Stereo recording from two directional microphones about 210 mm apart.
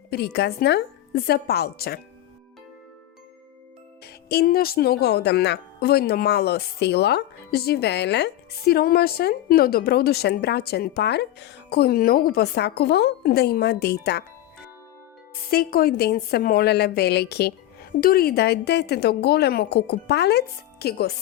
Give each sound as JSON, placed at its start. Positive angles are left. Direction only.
{"t": 0.1, "sound": "speech", "side_deg": 50}
{"t": 4.0, "sound": "speech", "side_deg": 50}
{"t": 15.4, "sound": "speech", "side_deg": 45}